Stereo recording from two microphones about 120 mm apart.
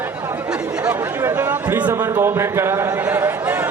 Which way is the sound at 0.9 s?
15° right (ahead or behind).